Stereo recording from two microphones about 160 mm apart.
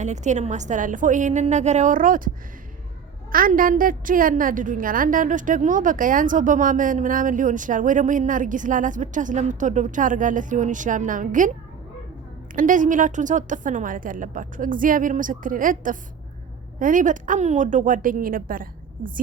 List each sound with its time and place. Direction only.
0.0 s a woman's voice: 45° right (ahead or behind)
3.3 s a woman's voice: 60° right (ahead or behind)
12.5 s a woman's voice: 55° right (ahead or behind)